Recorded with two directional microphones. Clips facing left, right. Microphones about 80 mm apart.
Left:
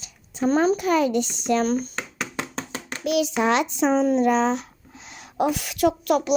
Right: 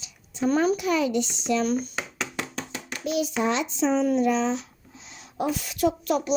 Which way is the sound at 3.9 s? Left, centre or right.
Left.